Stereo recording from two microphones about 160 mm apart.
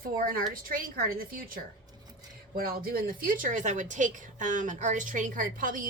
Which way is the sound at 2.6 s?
70° right (ahead or behind).